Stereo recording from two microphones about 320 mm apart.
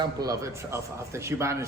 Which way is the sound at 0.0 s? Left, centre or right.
Centre.